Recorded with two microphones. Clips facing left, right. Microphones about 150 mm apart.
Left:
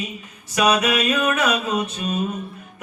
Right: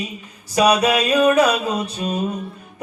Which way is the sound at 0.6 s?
35° right (ahead or behind).